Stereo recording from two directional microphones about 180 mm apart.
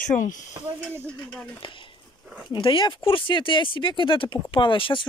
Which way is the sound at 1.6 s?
25° left (ahead or behind).